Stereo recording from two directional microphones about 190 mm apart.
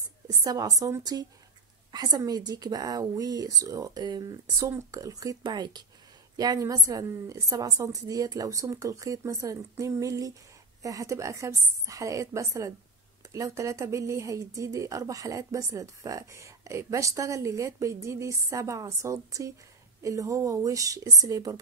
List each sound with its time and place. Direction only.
0.4 s speech: 20° right (ahead or behind)